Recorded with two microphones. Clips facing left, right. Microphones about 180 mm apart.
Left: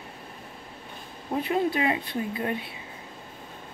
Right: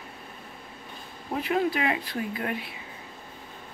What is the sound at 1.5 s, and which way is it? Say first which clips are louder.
Speech: even; 25° left (ahead or behind).